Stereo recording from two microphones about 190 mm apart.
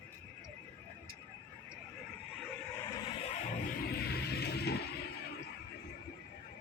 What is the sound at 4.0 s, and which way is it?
Music, 60° left (ahead or behind).